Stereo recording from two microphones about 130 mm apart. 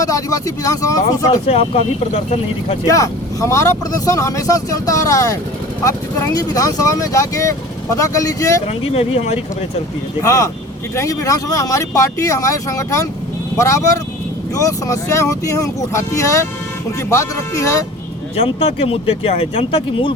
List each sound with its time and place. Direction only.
0.0 s speech: 25° left (ahead or behind)
1.5 s speech: 55° left (ahead or behind)
2.8 s speech: 25° left (ahead or behind)
8.6 s speech: 50° left (ahead or behind)
10.2 s speech: 25° left (ahead or behind)
18.3 s speech: 50° left (ahead or behind)